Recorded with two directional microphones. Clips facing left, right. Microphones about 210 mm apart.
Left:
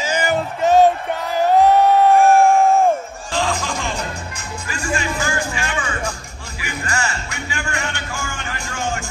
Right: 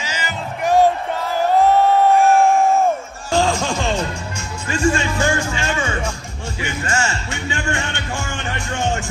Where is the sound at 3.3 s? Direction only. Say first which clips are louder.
Right 4 dB; 30° right (ahead or behind).